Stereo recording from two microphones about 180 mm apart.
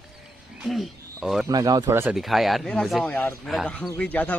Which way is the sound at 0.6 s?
Centre (ahead or behind).